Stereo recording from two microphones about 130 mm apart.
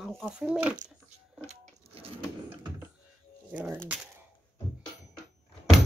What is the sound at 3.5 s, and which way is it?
Speech, 10° right (ahead or behind).